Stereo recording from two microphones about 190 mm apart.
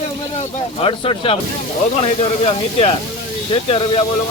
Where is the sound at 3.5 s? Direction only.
30° left (ahead or behind).